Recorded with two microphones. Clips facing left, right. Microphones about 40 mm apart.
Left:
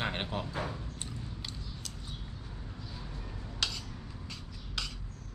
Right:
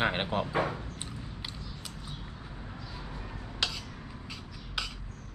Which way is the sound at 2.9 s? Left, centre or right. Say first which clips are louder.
Right 3 dB; right.